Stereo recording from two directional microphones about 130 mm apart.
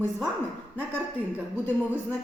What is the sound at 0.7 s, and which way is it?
Speech, 15° right (ahead or behind).